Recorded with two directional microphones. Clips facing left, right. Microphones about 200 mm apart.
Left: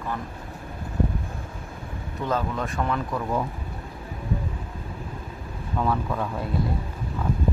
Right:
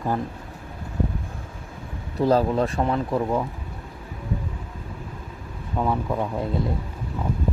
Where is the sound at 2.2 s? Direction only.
35° right (ahead or behind).